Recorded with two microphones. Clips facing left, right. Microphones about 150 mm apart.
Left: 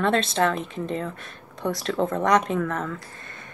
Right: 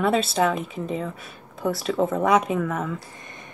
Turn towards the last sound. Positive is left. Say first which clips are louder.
# right 1 dB
turn(degrees=-5)  # may be behind; listen again after turning